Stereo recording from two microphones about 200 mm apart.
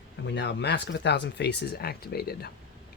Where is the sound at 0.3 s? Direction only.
60° left (ahead or behind).